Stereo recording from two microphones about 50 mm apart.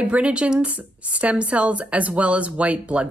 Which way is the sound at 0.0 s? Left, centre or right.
Right.